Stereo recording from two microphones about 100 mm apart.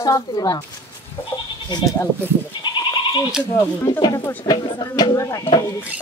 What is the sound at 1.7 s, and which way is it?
Speech, 45° left (ahead or behind).